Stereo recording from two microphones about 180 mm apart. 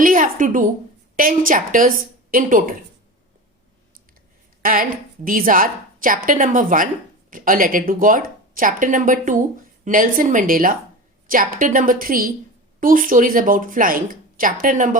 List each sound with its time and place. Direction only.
0.0 s a sound: 50° right (ahead or behind)
1.1 s speech: 50° right (ahead or behind)
4.6 s speech: 50° right (ahead or behind)